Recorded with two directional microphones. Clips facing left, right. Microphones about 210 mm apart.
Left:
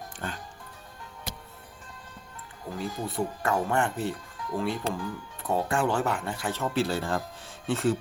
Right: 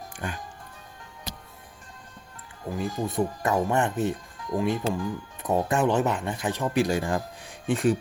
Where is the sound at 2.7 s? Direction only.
20° right (ahead or behind).